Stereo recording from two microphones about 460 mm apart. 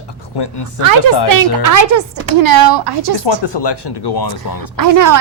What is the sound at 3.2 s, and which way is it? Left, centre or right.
Speech, left.